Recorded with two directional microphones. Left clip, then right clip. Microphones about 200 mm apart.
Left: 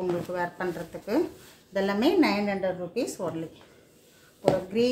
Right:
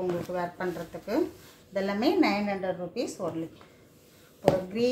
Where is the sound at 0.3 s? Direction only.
40° left (ahead or behind).